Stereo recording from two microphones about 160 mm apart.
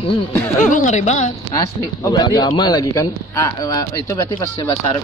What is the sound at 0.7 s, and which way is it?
Speech, 45° left (ahead or behind).